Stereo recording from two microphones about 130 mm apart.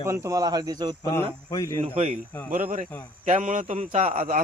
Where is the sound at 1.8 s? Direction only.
50° right (ahead or behind).